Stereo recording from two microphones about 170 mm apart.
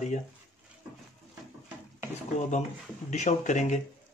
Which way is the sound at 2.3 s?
45° left (ahead or behind).